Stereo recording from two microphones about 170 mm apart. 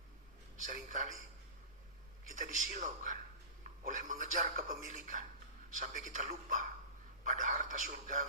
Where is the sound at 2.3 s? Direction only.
50° right (ahead or behind).